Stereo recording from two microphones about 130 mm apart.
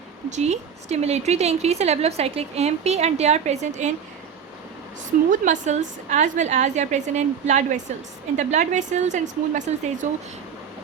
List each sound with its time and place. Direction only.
0.3 s a woman's voice: 60° right (ahead or behind)
5.3 s a woman's voice: 75° right (ahead or behind)